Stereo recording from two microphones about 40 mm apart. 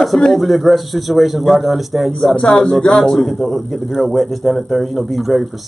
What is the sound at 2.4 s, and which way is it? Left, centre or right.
Speech, left.